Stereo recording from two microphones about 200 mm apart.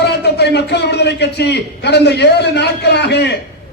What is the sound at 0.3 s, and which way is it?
A man's voice, 55° left (ahead or behind).